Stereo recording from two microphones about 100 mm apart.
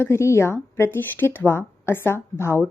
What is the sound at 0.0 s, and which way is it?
A woman's voice, 25° left (ahead or behind).